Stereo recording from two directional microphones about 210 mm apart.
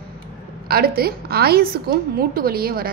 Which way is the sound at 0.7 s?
45° right (ahead or behind).